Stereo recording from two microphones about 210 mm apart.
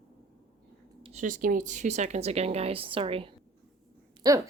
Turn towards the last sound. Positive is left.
turn(degrees=-15)  # may be behind; listen again after turning